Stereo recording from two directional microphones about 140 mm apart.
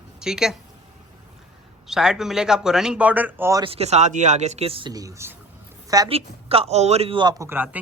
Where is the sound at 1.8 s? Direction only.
5° right (ahead or behind).